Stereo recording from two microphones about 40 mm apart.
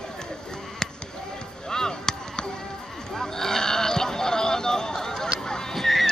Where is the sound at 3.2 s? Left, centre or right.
Centre.